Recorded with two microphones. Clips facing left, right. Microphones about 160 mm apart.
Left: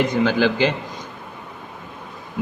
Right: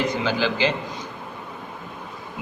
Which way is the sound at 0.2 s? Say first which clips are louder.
Left 5 dB; 50° left (ahead or behind).